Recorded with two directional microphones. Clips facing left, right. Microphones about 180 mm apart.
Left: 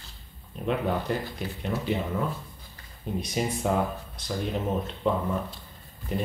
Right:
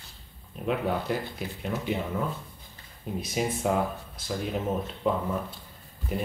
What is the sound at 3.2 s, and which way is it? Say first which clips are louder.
Speech: even; 5° right (ahead or behind).